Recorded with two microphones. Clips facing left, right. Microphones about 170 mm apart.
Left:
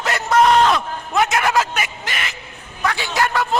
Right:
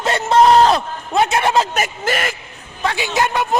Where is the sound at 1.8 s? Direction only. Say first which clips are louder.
Right 6 dB; 45° right (ahead or behind).